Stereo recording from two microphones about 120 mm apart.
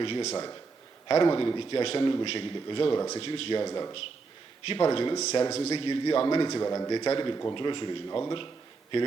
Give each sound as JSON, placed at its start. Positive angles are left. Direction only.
{"t": 0.0, "sound": "a man's voice", "side_deg": 45}
{"t": 3.6, "sound": "a man's voice", "side_deg": 35}
{"t": 5.7, "sound": "a man's voice", "side_deg": 40}
{"t": 8.0, "sound": "a man's voice", "side_deg": 30}